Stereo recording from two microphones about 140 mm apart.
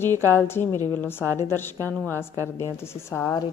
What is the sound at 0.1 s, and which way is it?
Speech, 20° right (ahead or behind).